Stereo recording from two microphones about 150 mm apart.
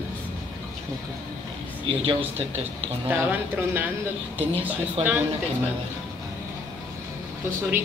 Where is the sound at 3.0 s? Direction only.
10° right (ahead or behind).